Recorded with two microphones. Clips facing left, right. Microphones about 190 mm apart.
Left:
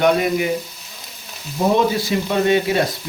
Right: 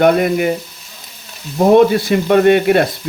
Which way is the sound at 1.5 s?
60° right (ahead or behind).